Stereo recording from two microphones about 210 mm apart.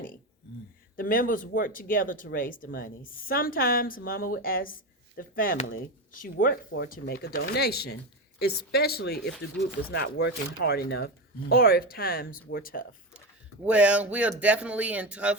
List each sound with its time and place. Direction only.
0.9 s speech: 40° left (ahead or behind)
13.7 s speech: 5° right (ahead or behind)